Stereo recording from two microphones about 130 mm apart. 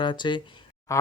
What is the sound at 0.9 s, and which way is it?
Speech, 20° left (ahead or behind).